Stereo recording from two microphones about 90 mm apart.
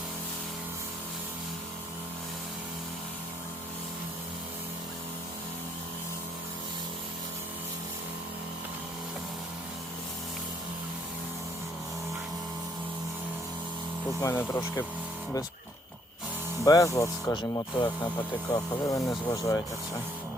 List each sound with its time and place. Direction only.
14.2 s speech: 30° left (ahead or behind)
16.6 s speech: 40° left (ahead or behind)
17.3 s speech: 60° left (ahead or behind)
18.5 s speech: 35° left (ahead or behind)